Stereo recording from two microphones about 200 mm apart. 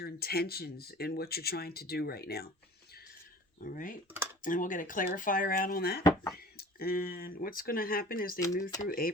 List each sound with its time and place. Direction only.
0.0 s speech: 50° left (ahead or behind)
3.6 s speech: 40° left (ahead or behind)
6.0 s speech: 20° left (ahead or behind)
6.3 s speech: 50° left (ahead or behind)